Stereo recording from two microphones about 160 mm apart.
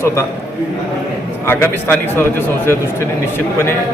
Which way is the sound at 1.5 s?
15° left (ahead or behind).